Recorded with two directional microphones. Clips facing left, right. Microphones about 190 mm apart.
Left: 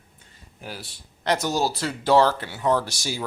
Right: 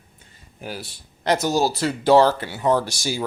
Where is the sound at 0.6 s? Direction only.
5° right (ahead or behind).